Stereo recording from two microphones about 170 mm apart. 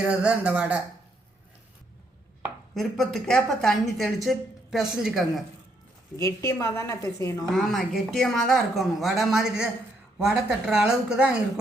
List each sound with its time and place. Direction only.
0.0 s speech: 5° right (ahead or behind)
2.7 s speech: centre (ahead or behind)
6.1 s a woman's voice: 20° left (ahead or behind)
7.5 s speech: centre (ahead or behind)